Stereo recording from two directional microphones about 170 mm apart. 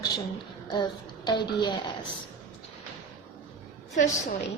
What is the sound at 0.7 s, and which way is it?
Speech, 25° left (ahead or behind).